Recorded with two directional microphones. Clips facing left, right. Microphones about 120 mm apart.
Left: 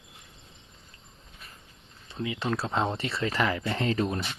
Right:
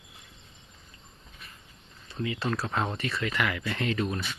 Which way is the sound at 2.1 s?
20° left (ahead or behind).